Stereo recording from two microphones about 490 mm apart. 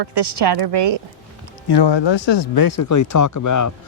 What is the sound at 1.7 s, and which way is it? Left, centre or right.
Speech, left.